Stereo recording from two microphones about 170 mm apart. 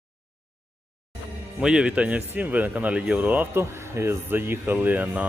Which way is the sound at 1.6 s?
5° right (ahead or behind).